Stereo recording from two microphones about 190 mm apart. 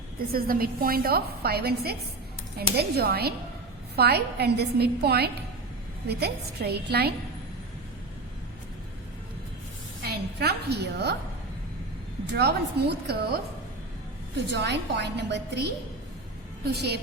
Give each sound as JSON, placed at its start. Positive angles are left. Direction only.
{"t": 0.3, "sound": "a woman's voice", "side_deg": -50}
{"t": 10.0, "sound": "a woman's voice", "side_deg": -55}
{"t": 12.2, "sound": "a woman's voice", "side_deg": -60}
{"t": 14.5, "sound": "a woman's voice", "side_deg": -65}
{"t": 16.7, "sound": "a woman's voice", "side_deg": -60}